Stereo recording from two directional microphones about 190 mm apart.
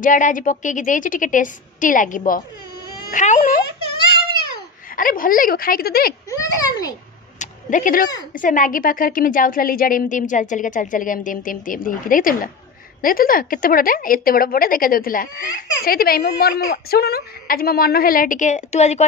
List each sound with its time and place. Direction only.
0.0 s a woman's voice: 45° left (ahead or behind)
4.9 s a woman's voice: 45° left (ahead or behind)
6.4 s a child's voice: 20° left (ahead or behind)
7.3 s a sound: 45° left (ahead or behind)
8.4 s a woman's voice: 45° left (ahead or behind)